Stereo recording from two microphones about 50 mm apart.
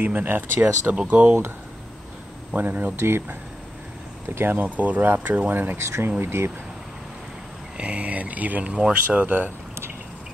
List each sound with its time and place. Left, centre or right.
0.0 s speech: right
2.5 s speech: right
3.0 s speech: right
4.4 s speech: right
5.8 s speech: right
6.0 s speech: right
7.7 s speech: right